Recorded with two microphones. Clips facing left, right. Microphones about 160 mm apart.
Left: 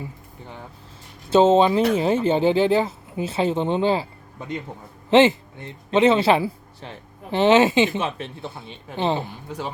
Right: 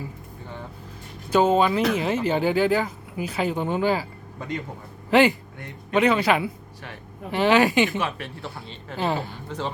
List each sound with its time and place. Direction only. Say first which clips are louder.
1.3 s speech: left 4 dB; 25° left (ahead or behind)